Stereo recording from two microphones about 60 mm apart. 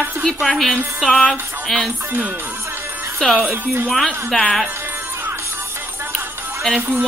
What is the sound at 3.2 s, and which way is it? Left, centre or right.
A woman's voice, centre.